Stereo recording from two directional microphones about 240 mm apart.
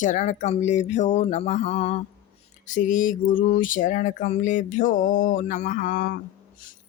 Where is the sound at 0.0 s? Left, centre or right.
Left.